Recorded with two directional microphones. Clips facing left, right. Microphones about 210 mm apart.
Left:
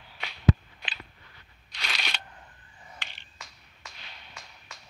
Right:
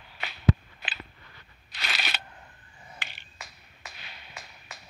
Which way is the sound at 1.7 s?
5° right (ahead or behind).